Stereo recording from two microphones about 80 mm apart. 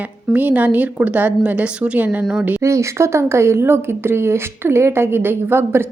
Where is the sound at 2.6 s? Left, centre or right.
Right.